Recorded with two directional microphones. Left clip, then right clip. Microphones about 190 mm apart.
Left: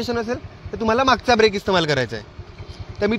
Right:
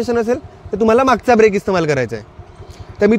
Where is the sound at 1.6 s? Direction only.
30° right (ahead or behind).